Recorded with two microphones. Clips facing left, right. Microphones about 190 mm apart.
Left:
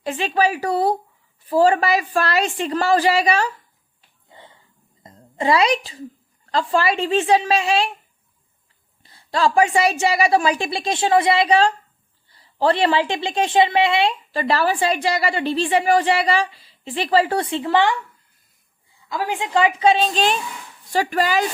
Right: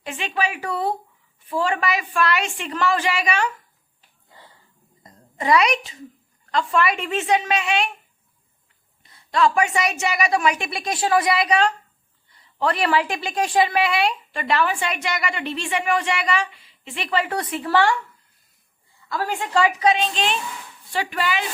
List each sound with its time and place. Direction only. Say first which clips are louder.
0.0 s a woman's voice: left 6 dB; 35° left (ahead or behind)
4.3 s wheeze: left 4 dB; 20° left (ahead or behind)
5.0 s a woman's voice: left 2 dB; 25° left (ahead or behind)
9.0 s a woman's voice: even; 30° left (ahead or behind)
19.0 s a woman's voice: left 1 dB; 15° left (ahead or behind); by 21.4 s 40° left (ahead or behind)